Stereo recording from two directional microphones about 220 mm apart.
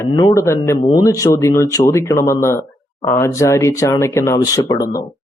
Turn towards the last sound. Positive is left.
turn(degrees=15)  # may be behind; listen again after turning